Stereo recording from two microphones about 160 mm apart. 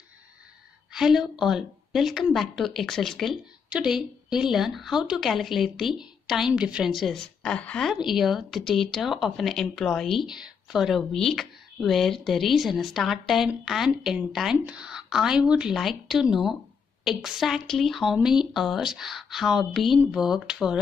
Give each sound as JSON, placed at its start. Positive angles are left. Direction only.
{"t": 0.9, "sound": "speech", "side_deg": -5}